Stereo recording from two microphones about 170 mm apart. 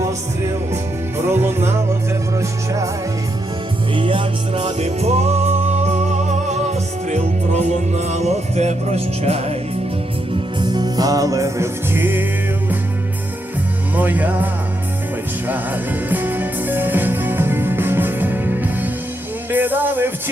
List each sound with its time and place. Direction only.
1.2 s music: 15° right (ahead or behind)
3.9 s music: 30° right (ahead or behind)
10.6 s music: 25° right (ahead or behind)
13.9 s music: 10° right (ahead or behind)